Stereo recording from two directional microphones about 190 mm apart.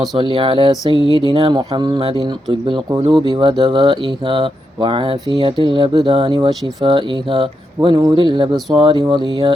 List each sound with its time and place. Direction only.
0.3 s speech: 25° right (ahead or behind)